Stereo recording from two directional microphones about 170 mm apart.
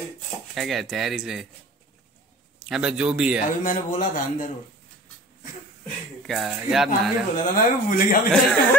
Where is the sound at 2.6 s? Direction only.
5° right (ahead or behind).